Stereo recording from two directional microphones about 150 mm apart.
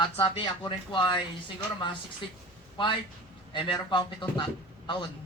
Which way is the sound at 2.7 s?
35° left (ahead or behind).